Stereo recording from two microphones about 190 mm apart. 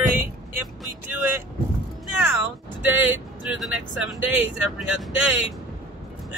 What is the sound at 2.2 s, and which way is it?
Speech, 5° right (ahead or behind).